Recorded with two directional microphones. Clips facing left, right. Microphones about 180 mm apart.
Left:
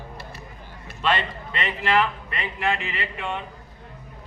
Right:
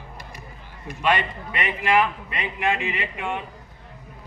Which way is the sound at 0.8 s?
15° right (ahead or behind).